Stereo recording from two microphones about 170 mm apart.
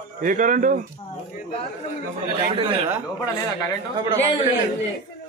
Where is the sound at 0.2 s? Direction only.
50° right (ahead or behind).